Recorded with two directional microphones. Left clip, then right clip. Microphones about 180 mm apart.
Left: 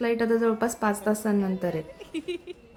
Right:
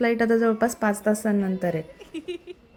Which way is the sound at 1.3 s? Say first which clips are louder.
Right 2 dB; centre (ahead or behind).